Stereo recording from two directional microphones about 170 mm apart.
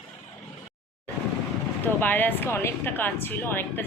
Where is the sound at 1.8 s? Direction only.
10° left (ahead or behind).